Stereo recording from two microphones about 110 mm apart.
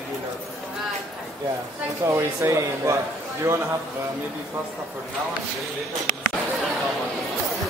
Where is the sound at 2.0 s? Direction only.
25° right (ahead or behind).